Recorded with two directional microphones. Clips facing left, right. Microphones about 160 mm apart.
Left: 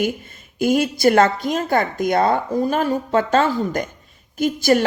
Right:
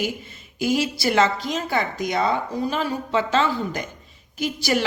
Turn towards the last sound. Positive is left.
turn(degrees=50)  # may be behind; listen again after turning